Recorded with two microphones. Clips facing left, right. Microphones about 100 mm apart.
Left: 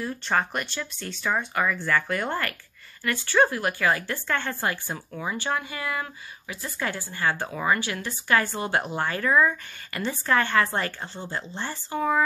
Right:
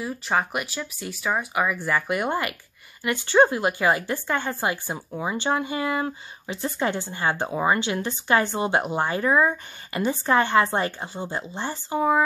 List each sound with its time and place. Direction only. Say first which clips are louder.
0.0 s speech: right 1 dB; 10° right (ahead or behind)